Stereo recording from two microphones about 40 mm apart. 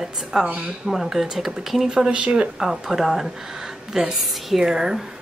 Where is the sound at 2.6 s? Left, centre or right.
Centre.